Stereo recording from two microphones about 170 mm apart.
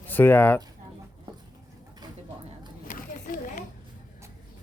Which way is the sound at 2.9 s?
55° left (ahead or behind).